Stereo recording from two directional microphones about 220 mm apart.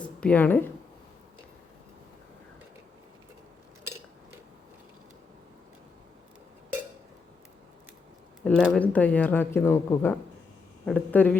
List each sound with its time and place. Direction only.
0.2 s speech: 5° left (ahead or behind)
8.4 s speech: centre (ahead or behind)